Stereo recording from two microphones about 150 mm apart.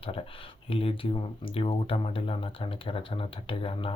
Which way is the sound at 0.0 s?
40° left (ahead or behind).